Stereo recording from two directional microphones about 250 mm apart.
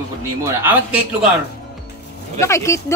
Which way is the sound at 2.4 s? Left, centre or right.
Centre.